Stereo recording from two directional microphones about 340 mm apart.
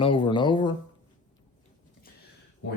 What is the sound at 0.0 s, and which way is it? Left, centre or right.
Speech, centre.